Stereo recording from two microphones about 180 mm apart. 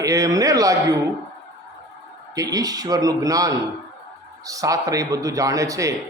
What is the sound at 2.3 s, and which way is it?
A man's voice, 20° right (ahead or behind).